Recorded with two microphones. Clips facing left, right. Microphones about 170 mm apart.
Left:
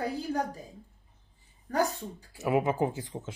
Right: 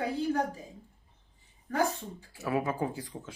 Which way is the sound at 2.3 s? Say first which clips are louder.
Left 4 dB; 20° left (ahead or behind).